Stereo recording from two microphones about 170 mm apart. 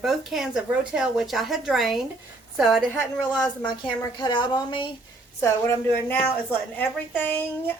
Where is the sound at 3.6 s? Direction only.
25° left (ahead or behind).